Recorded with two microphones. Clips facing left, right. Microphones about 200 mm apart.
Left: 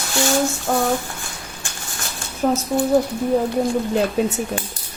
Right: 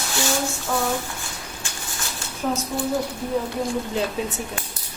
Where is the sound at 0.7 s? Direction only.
50° left (ahead or behind).